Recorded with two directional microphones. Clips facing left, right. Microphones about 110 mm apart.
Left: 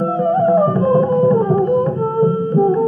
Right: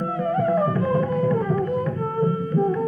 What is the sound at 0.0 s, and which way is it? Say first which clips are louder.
Music: left 8 dB; 30° left (ahead or behind).